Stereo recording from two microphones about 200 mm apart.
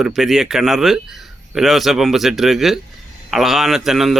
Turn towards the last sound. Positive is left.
turn(degrees=0)  # may be behind; listen again after turning